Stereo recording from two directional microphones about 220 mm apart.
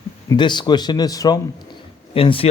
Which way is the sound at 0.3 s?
20° left (ahead or behind).